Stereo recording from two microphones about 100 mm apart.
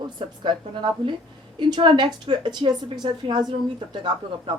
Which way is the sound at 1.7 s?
50° right (ahead or behind).